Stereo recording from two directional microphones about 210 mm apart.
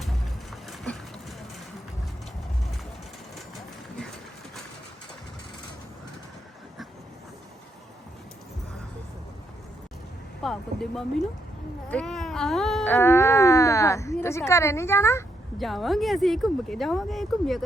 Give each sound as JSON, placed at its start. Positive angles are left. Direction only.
{"t": 10.4, "sound": "speech", "side_deg": 0}
{"t": 11.9, "sound": "a sound", "side_deg": 5}
{"t": 15.5, "sound": "speech", "side_deg": 0}